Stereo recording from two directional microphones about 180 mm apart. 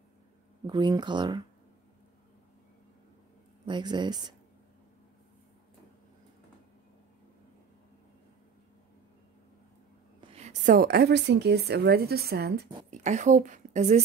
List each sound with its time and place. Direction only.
0.7 s speech: 25° right (ahead or behind)
3.6 s speech: 25° right (ahead or behind)
10.2 s a sound: 35° right (ahead or behind)
10.6 s a woman's voice: 55° right (ahead or behind)
12.9 s a woman's voice: 40° right (ahead or behind)